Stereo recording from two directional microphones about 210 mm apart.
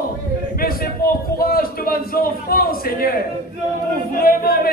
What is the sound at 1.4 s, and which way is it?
A man's voice, 45° left (ahead or behind).